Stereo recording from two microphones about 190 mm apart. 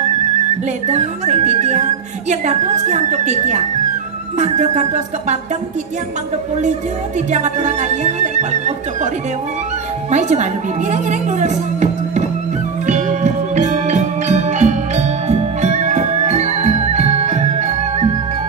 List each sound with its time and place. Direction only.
0.8 s whistling: 35° right (ahead or behind)
7.2 s whistling: 35° right (ahead or behind)
10.1 s whistling: 40° right (ahead or behind)
12.8 s music: 40° right (ahead or behind)